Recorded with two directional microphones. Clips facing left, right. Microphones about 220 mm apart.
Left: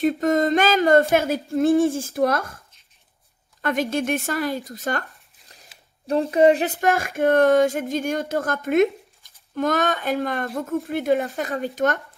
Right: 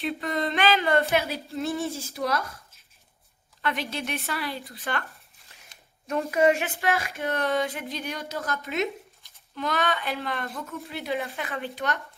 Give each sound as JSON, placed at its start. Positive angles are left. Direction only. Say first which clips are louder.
{"t": 0.0, "sound": "speech", "louder": "left 9 dB", "side_deg": 45}
{"t": 3.6, "sound": "speech", "louder": "left 8 dB", "side_deg": 45}
{"t": 5.7, "sound": "a sound", "louder": "left 1 dB", "side_deg": 5}
{"t": 6.0, "sound": "speech", "louder": "left 6 dB", "side_deg": 30}